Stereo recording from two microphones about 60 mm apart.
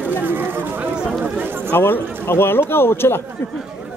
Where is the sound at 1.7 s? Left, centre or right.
Left.